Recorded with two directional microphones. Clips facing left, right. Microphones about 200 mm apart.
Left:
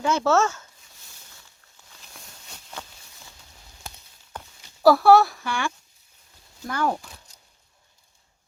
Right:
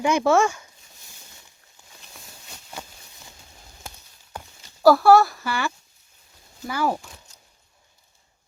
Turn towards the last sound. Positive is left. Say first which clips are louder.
# right 1 dB
turn(degrees=-5)  # may be behind; listen again after turning